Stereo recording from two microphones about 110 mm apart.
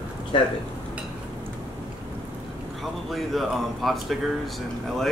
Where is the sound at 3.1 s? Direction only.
Centre (ahead or behind).